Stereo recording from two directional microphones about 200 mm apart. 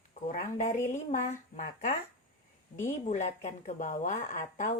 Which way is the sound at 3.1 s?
35° left (ahead or behind).